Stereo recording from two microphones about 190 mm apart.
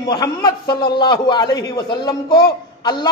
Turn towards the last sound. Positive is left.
turn(degrees=25)  # may be behind; listen again after turning